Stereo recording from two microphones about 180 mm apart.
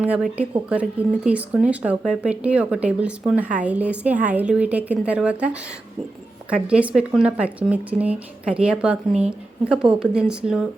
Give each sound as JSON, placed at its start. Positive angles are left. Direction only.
{"t": 0.0, "sound": "speech", "side_deg": -10}